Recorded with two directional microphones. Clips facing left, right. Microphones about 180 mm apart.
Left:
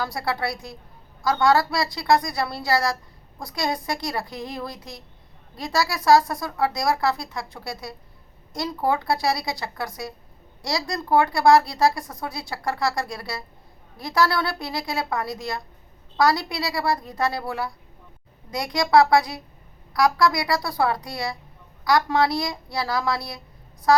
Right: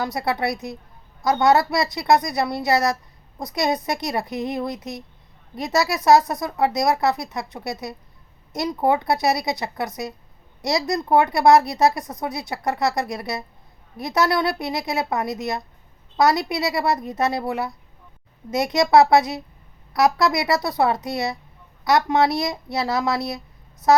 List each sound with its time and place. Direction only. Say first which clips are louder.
0.0 s a woman's voice: right 3 dB; 20° right (ahead or behind)